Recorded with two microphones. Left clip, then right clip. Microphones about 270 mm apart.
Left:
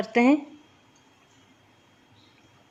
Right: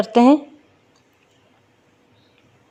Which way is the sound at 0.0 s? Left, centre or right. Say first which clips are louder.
Right 7 dB; right.